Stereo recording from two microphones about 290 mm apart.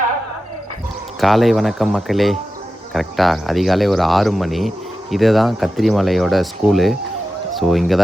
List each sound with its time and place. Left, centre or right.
1.2 s speech: centre